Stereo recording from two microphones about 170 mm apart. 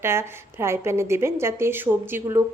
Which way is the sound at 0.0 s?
15° right (ahead or behind).